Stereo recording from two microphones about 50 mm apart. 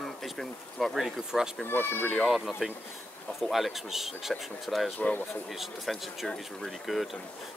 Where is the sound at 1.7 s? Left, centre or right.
Left.